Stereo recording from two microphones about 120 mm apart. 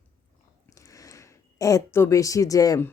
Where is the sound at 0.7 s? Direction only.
25° left (ahead or behind).